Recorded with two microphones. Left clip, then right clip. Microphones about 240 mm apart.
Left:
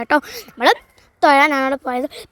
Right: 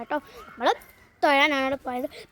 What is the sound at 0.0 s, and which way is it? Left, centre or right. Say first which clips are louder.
Speech: left 13 dB; left.